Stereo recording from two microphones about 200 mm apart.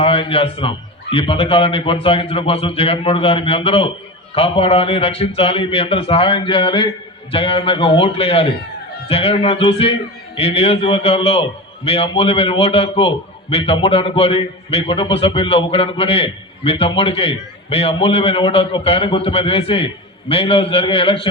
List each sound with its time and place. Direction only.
0.0 s a man's voice: 30° left (ahead or behind)